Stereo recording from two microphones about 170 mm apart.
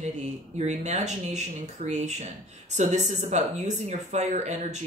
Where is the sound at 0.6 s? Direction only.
45° right (ahead or behind).